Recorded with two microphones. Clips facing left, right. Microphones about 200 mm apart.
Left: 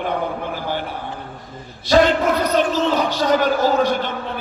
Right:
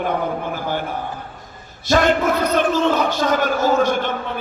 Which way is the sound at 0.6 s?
45° right (ahead or behind).